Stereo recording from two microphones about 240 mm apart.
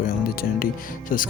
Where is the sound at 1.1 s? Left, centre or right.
Left.